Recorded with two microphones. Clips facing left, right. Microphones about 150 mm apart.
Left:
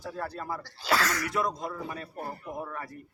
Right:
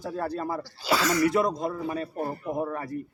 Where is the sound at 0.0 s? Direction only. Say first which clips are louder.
Right 6 dB; 30° right (ahead or behind).